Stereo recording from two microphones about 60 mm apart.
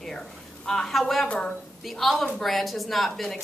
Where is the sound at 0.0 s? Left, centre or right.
Centre.